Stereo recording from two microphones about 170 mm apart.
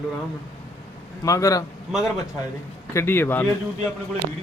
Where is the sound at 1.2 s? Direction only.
20° left (ahead or behind).